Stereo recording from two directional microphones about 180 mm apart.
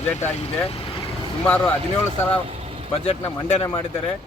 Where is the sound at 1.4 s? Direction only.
10° left (ahead or behind).